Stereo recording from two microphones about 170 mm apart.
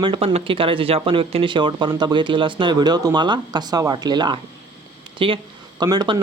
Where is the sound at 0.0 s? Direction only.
30° right (ahead or behind).